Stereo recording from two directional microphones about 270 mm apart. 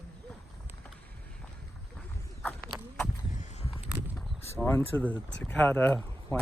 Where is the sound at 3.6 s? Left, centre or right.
Left.